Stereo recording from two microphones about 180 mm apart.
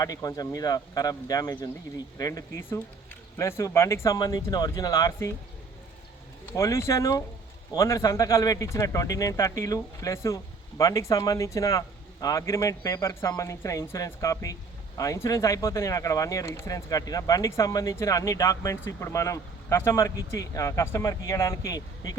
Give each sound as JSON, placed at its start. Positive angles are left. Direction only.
{"t": 0.0, "sound": "a man's voice", "side_deg": 20}
{"t": 6.5, "sound": "a man's voice", "side_deg": 15}